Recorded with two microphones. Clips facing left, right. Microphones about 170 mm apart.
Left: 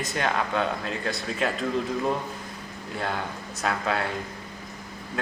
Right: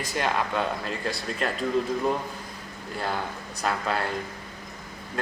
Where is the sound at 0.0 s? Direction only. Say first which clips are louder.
Even; centre (ahead or behind).